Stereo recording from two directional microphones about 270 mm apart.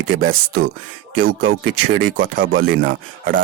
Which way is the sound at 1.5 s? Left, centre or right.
Right.